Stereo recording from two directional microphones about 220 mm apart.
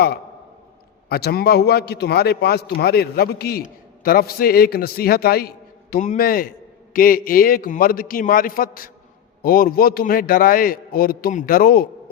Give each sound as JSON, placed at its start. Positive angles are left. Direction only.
{"t": 1.1, "sound": "a man's voice", "side_deg": 45}